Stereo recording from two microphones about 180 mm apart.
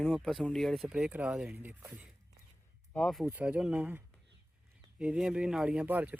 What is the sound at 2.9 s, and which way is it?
Speech, centre (ahead or behind).